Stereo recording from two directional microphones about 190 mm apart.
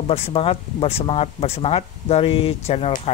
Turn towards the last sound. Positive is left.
turn(degrees=35)  # may be behind; listen again after turning